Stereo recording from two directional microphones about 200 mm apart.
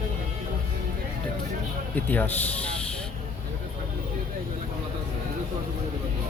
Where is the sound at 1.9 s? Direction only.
10° left (ahead or behind).